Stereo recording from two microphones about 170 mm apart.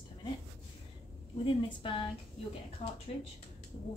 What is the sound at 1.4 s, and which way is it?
Speech, 30° left (ahead or behind).